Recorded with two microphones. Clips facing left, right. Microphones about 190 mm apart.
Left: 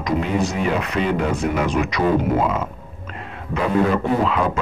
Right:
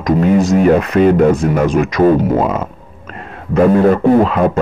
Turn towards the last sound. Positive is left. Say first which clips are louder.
# right 9 dB
turn(degrees=-50)  # may be behind; listen again after turning